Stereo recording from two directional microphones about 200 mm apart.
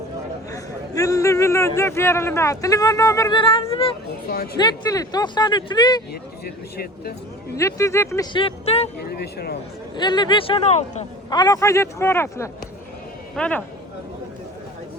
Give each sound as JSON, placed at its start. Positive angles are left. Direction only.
{"t": 0.5, "sound": "a man's voice", "side_deg": 15}
{"t": 6.4, "sound": "speech", "side_deg": 50}
{"t": 7.5, "sound": "speech", "side_deg": 15}
{"t": 9.0, "sound": "speech", "side_deg": 50}
{"t": 9.9, "sound": "speech", "side_deg": 20}
{"t": 11.3, "sound": "a man's voice", "side_deg": 20}